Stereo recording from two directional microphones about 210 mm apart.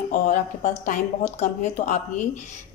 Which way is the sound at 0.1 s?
35° left (ahead or behind).